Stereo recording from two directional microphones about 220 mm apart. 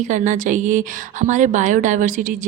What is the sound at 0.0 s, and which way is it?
A woman's voice, 35° right (ahead or behind).